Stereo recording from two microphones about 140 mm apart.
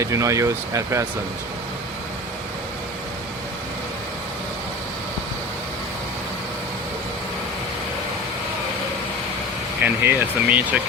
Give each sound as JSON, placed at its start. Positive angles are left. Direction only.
{"t": 0.0, "sound": "speech", "side_deg": -20}
{"t": 9.8, "sound": "speech", "side_deg": -10}